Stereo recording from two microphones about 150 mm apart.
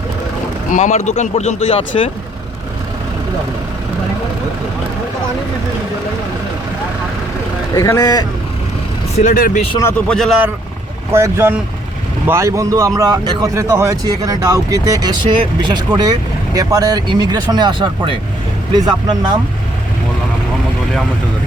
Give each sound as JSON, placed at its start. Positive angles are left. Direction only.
{"t": 0.7, "sound": "speech", "side_deg": 50}
{"t": 7.8, "sound": "speech", "side_deg": 20}
{"t": 9.1, "sound": "speech", "side_deg": 60}
{"t": 10.1, "sound": "speech", "side_deg": 0}
{"t": 11.1, "sound": "speech", "side_deg": -15}